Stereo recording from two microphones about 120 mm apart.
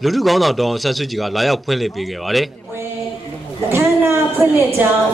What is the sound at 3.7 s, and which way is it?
Speech, 20° right (ahead or behind).